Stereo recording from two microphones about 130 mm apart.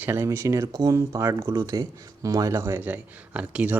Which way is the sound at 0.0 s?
20° right (ahead or behind).